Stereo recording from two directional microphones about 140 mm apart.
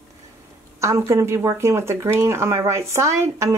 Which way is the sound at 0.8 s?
20° right (ahead or behind).